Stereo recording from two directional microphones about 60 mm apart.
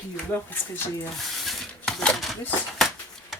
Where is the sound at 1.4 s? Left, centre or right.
Centre.